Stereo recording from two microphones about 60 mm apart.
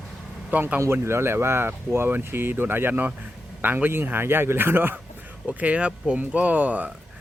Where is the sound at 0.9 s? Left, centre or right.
Right.